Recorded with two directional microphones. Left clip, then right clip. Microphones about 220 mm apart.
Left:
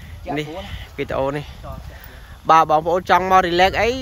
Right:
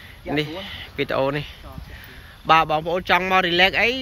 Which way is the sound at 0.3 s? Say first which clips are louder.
Right 1 dB; 15° left (ahead or behind).